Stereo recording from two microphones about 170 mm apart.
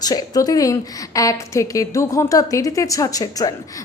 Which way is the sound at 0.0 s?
20° left (ahead or behind).